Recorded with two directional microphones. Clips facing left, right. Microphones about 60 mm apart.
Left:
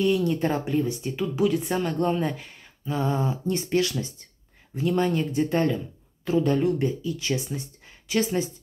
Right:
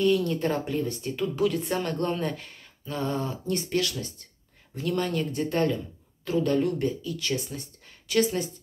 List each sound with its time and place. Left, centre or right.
0.0 s speech: centre